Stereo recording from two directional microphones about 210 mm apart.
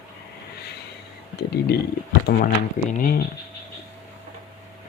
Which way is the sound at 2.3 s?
65° left (ahead or behind).